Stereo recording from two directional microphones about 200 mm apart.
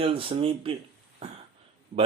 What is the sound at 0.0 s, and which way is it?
Speech, 30° right (ahead or behind).